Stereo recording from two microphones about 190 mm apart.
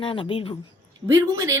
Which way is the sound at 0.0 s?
30° left (ahead or behind).